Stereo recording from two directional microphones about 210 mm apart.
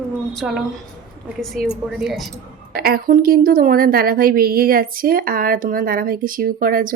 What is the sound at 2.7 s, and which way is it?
A woman's voice, 45° right (ahead or behind).